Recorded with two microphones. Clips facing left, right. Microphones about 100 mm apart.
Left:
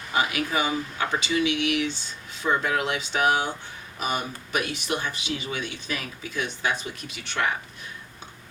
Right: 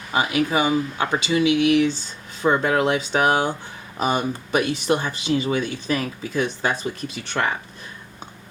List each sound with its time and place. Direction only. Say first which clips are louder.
0.1 s speech: right 5 dB; 25° right (ahead or behind)